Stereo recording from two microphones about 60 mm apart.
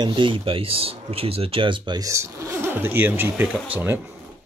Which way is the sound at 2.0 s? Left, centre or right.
Right.